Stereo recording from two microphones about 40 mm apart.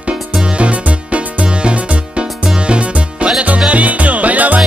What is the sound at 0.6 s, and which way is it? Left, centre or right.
Music, right.